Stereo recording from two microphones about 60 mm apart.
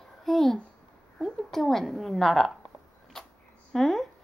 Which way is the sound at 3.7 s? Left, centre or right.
Centre.